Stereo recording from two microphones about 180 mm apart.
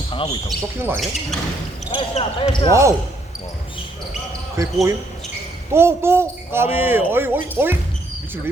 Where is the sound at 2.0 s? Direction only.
30° left (ahead or behind).